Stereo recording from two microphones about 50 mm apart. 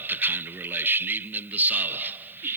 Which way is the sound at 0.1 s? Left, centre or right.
Right.